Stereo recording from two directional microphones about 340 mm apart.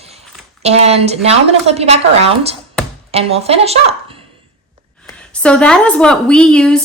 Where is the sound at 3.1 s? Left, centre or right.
Centre.